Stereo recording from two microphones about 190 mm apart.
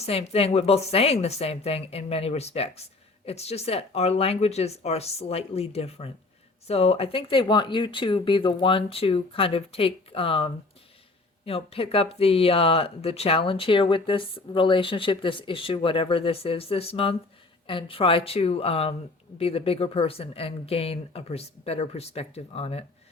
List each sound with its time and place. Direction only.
0.0 s speech: 35° left (ahead or behind)